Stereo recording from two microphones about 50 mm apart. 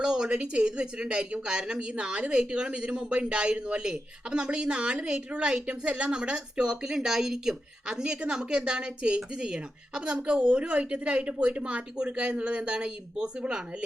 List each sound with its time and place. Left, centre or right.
0.0 s speech: centre